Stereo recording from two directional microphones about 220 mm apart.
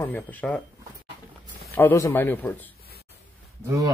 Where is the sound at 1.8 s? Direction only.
10° left (ahead or behind).